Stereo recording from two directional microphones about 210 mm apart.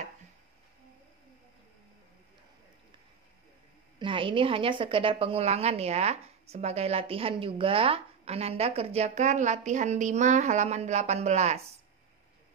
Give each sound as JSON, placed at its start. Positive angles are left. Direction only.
{"t": 4.0, "sound": "a woman's voice", "side_deg": -25}